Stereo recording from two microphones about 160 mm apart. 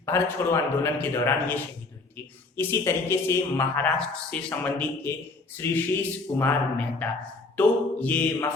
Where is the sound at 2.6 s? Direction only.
15° left (ahead or behind).